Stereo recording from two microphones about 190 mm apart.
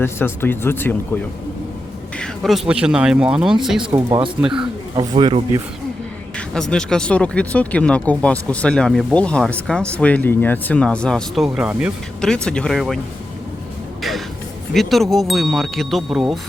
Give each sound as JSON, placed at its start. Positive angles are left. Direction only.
{"t": 0.0, "sound": "speech", "side_deg": 10}
{"t": 3.8, "sound": "speech", "side_deg": -25}
{"t": 4.4, "sound": "speech", "side_deg": -5}
{"t": 4.6, "sound": "speech", "side_deg": -25}
{"t": 6.3, "sound": "speech", "side_deg": 5}
{"t": 12.2, "sound": "speech", "side_deg": 5}
{"t": 14.7, "sound": "speech", "side_deg": 0}